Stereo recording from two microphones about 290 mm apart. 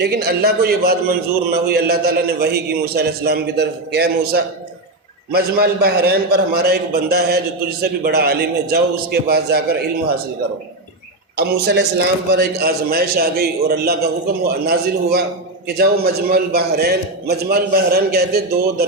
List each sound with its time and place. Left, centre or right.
0.0 s a man's voice: right
11.3 s a man's voice: right